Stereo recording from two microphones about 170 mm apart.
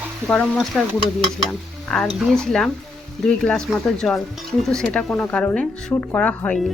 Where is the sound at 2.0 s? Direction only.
Centre (ahead or behind).